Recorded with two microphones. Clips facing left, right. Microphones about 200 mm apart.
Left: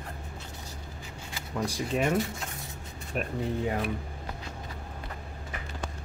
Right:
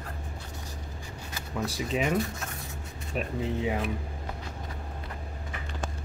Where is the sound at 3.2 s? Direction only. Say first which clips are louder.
Even; 5° right (ahead or behind).